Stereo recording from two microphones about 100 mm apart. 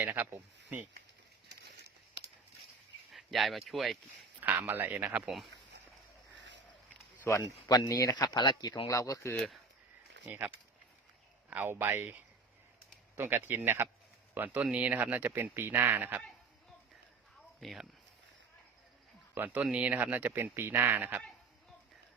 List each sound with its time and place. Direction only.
0.0 s speech: 20° right (ahead or behind)
3.1 s speech: centre (ahead or behind)
4.4 s speech: 15° right (ahead or behind)
7.3 s speech: 35° left (ahead or behind)
8.9 s speech: 35° left (ahead or behind)
9.3 s speech: 5° left (ahead or behind)
10.2 s speech: 15° right (ahead or behind)
11.5 s speech: 20° right (ahead or behind)
17.6 s speech: centre (ahead or behind)
19.3 s speech: 20° right (ahead or behind)